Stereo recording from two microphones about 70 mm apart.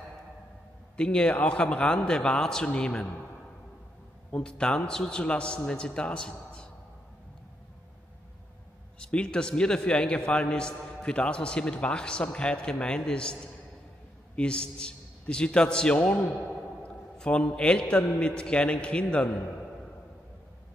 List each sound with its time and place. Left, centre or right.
0.9 s a man's voice: centre
4.3 s a man's voice: centre
9.0 s a man's voice: centre